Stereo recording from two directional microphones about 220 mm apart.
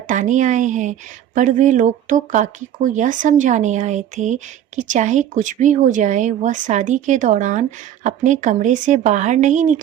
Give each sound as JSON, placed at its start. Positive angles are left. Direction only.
{"t": 0.1, "sound": "speech", "side_deg": -35}